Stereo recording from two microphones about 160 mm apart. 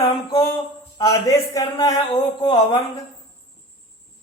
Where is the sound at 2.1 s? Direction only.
35° left (ahead or behind).